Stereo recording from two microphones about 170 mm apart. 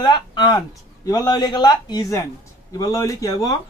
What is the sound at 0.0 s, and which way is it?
Speech, 25° left (ahead or behind).